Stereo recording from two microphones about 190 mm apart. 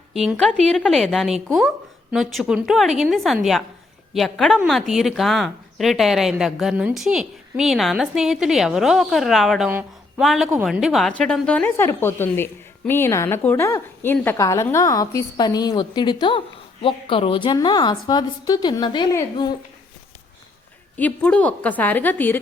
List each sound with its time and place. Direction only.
0.1 s a woman's voice: centre (ahead or behind); by 19.5 s 20° left (ahead or behind)
20.9 s a woman's voice: 5° left (ahead or behind)